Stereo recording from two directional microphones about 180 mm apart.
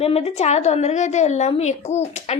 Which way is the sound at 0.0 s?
35° left (ahead or behind).